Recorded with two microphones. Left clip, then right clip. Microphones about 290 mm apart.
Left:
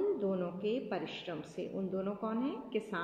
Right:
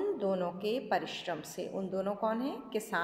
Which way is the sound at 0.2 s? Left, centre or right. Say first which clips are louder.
Right 3 dB; right.